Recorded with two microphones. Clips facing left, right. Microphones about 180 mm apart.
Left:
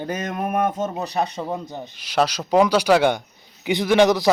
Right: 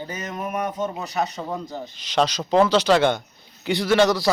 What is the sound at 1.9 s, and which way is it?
Speech, 10° left (ahead or behind).